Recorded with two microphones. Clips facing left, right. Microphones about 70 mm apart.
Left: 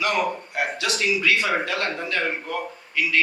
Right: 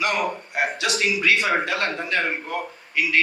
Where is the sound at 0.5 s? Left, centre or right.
Right.